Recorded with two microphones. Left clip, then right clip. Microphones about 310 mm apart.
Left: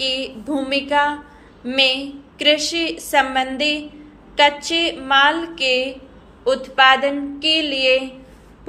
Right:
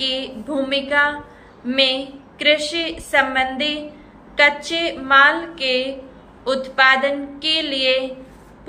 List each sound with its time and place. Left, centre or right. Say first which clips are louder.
0.0 s a woman's voice: left 1 dB; centre